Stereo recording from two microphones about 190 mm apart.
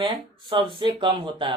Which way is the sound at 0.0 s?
25° right (ahead or behind).